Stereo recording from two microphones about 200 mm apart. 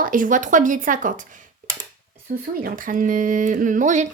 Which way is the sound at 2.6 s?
45° right (ahead or behind).